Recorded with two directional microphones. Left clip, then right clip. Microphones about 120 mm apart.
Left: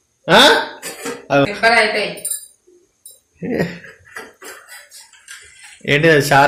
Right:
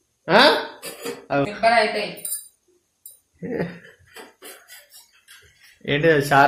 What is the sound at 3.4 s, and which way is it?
Speech, 25° left (ahead or behind).